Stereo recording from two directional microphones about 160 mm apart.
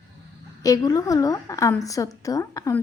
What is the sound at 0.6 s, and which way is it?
Speech, 20° left (ahead or behind).